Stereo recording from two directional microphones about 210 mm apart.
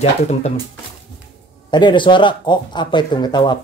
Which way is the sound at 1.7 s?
20° left (ahead or behind).